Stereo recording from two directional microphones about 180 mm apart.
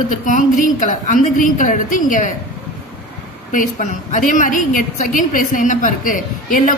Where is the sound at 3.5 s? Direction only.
45° left (ahead or behind).